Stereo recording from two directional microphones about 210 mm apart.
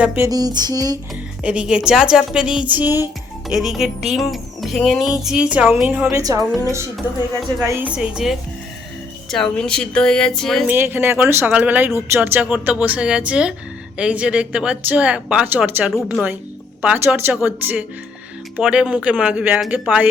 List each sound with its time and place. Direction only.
0.0 s speech: 15° right (ahead or behind)
1.4 s speech: 5° right (ahead or behind)
7.6 s speech: 10° right (ahead or behind)
10.8 s speech: 10° right (ahead or behind)